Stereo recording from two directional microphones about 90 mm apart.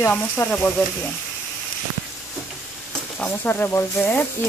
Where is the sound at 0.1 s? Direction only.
20° left (ahead or behind).